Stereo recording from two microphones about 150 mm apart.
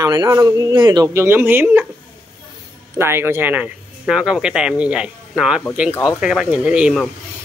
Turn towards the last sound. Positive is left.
turn(degrees=-5)  # may be behind; listen again after turning